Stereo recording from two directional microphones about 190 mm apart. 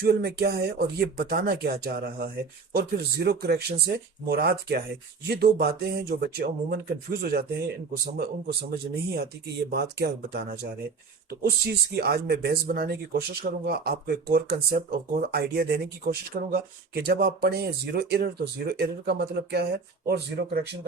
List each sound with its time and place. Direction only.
0.0 s speech: 60° right (ahead or behind)
8.7 s speech: 55° right (ahead or behind)